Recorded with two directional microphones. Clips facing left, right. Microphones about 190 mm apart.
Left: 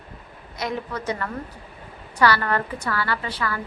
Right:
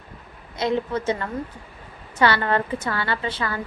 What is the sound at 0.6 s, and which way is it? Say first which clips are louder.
A woman's voice: right 5 dB; 25° right (ahead or behind).